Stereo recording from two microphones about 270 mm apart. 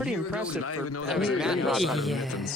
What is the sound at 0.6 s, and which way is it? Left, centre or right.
Speech, left.